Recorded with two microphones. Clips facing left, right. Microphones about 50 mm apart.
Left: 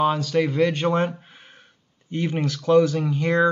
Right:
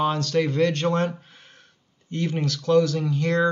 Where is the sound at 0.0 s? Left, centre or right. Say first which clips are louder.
Left 2 dB; centre.